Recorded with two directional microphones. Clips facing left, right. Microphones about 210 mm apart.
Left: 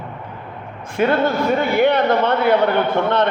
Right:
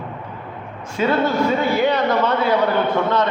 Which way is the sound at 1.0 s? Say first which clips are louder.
Left 1 dB; 55° left (ahead or behind).